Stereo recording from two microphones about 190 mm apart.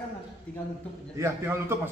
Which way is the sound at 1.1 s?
15° right (ahead or behind).